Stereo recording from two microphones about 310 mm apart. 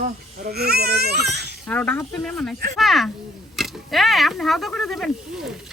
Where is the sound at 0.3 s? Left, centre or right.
Right.